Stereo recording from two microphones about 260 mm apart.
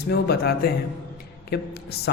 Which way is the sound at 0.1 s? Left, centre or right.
Left.